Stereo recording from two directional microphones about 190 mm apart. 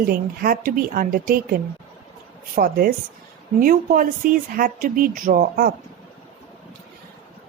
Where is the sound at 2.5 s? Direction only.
50° right (ahead or behind).